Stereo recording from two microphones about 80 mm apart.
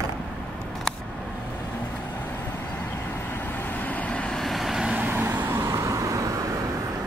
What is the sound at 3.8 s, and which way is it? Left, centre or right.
Vehicle, centre.